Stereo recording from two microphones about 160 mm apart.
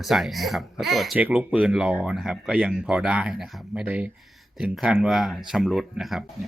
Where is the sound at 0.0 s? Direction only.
Centre (ahead or behind).